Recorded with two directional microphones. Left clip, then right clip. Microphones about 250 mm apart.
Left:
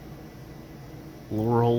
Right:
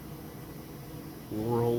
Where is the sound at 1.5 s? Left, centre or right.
Left.